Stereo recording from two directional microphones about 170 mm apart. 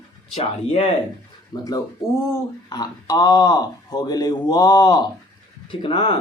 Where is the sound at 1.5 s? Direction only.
25° left (ahead or behind).